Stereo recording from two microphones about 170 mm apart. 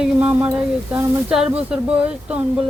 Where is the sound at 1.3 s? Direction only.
5° right (ahead or behind).